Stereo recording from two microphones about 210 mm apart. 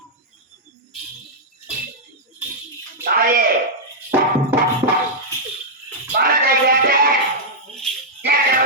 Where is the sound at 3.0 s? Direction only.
45° right (ahead or behind).